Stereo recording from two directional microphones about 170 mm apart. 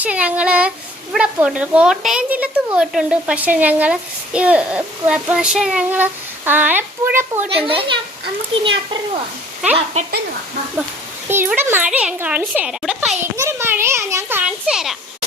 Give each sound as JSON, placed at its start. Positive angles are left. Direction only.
{"t": 0.0, "sound": "speech", "side_deg": -10}
{"t": 7.5, "sound": "a child's voice", "side_deg": -30}
{"t": 9.7, "sound": "a child's voice", "side_deg": -40}
{"t": 11.3, "sound": "speech", "side_deg": -10}
{"t": 13.3, "sound": "a sound", "side_deg": -15}